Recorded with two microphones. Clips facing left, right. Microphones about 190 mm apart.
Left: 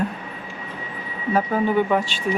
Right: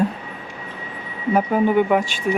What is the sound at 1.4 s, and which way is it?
Speech, 15° right (ahead or behind).